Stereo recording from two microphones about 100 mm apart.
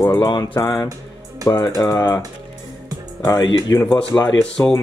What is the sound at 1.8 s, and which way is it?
Speech, 35° left (ahead or behind).